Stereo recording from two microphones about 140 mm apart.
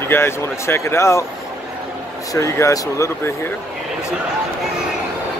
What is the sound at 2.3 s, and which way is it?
Speech, 20° left (ahead or behind).